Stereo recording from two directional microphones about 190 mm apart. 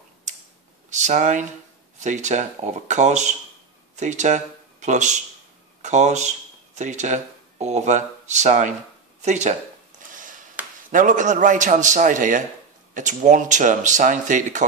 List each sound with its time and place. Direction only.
0.8 s speech: 40° right (ahead or behind)
9.2 s a sound: 40° right (ahead or behind)
10.9 s speech: 45° right (ahead or behind)